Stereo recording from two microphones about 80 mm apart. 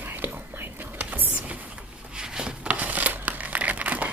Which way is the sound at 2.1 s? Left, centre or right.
Centre.